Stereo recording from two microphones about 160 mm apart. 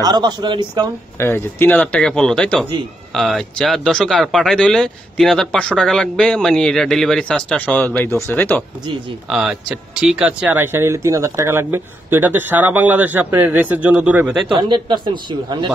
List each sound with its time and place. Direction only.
0.0 s speech: 25° right (ahead or behind)
1.1 s speech: 15° left (ahead or behind)
9.3 s speech: 5° right (ahead or behind)
14.5 s speech: 30° right (ahead or behind)